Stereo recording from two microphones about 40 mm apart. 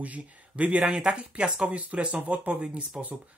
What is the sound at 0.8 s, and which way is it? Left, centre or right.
Speech, centre.